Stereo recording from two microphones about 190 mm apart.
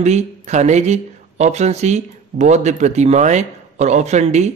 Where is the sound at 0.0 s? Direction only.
35° right (ahead or behind).